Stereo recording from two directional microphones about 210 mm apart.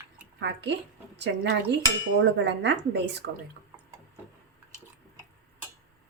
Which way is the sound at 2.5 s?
55° right (ahead or behind).